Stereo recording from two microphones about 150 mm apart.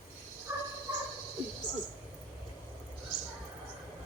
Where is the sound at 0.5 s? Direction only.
15° right (ahead or behind).